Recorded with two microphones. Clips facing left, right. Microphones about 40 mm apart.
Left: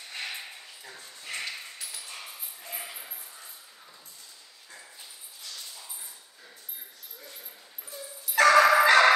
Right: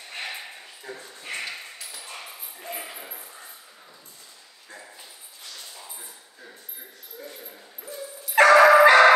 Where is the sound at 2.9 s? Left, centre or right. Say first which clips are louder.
Right 4 dB; right.